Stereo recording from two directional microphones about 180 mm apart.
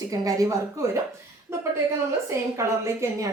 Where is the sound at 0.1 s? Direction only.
20° right (ahead or behind).